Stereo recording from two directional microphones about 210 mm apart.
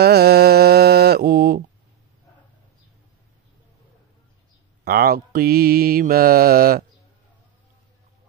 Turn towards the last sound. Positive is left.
turn(degrees=-45)  # may be behind; listen again after turning